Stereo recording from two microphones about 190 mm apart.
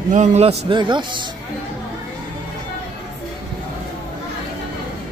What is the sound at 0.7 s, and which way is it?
Speech, 25° right (ahead or behind).